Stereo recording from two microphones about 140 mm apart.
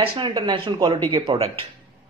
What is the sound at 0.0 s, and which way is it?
A man's voice, 40° right (ahead or behind).